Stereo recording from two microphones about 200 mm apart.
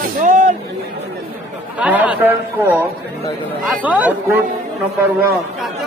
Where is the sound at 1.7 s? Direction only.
5° right (ahead or behind).